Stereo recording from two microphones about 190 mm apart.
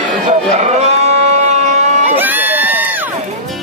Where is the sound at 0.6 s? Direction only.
35° right (ahead or behind).